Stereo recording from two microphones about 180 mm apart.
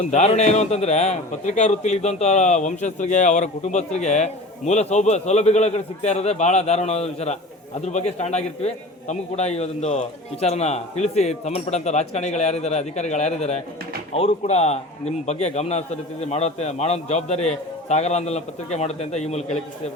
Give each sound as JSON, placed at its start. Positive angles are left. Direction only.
{"t": 0.1, "sound": "a man's voice", "side_deg": 40}